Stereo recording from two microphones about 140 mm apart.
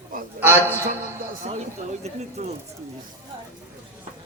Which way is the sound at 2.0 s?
50° right (ahead or behind).